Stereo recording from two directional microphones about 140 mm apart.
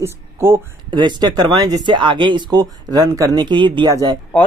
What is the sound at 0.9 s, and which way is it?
Speech, 35° right (ahead or behind).